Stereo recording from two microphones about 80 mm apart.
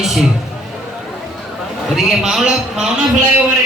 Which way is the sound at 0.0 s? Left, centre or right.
Centre.